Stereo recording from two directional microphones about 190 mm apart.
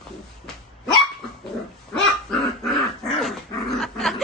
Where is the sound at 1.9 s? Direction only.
5° left (ahead or behind).